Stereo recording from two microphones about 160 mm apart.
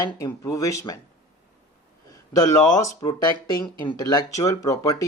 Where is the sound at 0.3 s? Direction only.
20° left (ahead or behind).